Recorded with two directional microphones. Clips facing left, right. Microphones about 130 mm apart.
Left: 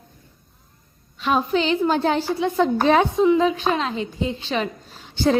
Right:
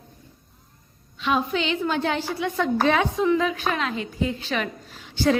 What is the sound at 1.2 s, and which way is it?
A woman's voice, 40° left (ahead or behind).